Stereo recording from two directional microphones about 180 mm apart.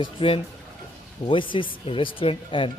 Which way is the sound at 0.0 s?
30° left (ahead or behind).